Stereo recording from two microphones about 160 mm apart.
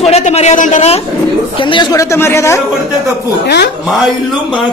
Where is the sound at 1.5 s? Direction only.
30° left (ahead or behind).